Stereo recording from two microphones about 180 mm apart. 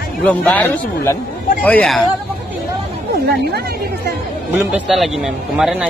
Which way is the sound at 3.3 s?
65° right (ahead or behind).